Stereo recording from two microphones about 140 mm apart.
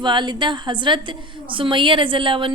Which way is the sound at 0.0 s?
35° right (ahead or behind).